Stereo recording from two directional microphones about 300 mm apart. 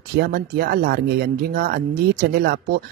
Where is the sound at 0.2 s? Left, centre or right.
Right.